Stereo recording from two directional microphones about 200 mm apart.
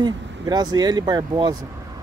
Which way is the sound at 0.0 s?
20° right (ahead or behind).